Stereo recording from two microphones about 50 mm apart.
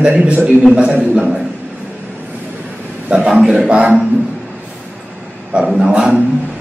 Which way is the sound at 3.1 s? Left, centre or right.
Right.